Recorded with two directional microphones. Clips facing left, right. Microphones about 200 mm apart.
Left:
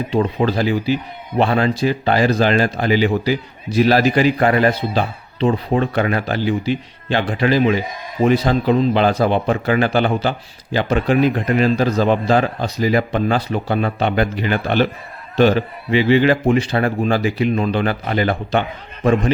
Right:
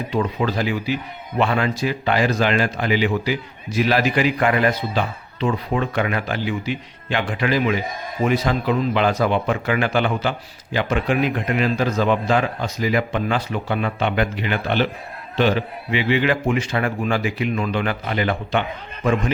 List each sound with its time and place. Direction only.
0.1 s speech: 30° left (ahead or behind)